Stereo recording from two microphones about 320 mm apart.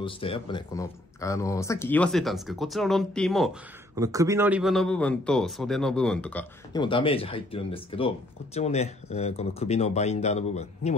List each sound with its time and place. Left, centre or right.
0.0 s a man's voice: centre
3.9 s a man's voice: centre; by 11.0 s left